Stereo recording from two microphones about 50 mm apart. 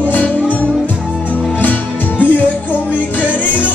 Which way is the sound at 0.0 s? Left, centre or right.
Left.